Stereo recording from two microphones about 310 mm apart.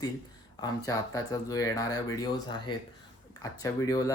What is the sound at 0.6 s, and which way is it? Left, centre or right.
Speech, centre.